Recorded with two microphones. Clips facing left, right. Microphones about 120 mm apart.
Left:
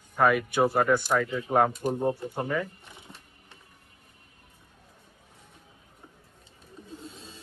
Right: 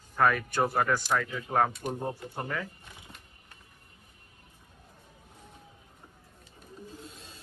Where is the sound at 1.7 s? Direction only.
35° left (ahead or behind).